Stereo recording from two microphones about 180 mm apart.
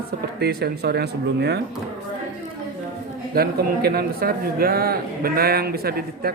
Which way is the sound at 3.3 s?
55° right (ahead or behind).